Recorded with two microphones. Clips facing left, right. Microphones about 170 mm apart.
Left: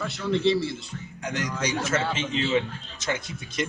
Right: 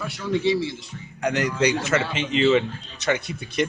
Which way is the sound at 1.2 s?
65° right (ahead or behind).